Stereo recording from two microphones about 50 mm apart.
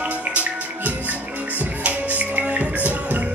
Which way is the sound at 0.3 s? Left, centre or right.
Right.